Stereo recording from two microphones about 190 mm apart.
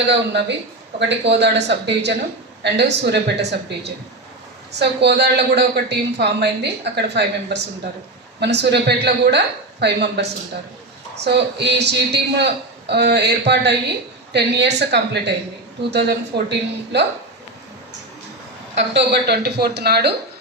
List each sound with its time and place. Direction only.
0.1 s a woman's voice: 65° right (ahead or behind)
18.9 s a woman's voice: 60° right (ahead or behind)